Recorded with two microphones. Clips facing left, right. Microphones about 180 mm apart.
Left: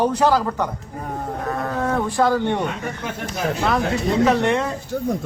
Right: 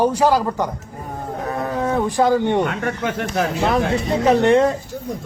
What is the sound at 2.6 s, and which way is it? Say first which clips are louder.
Speech: right 4 dB; 70° right (ahead or behind).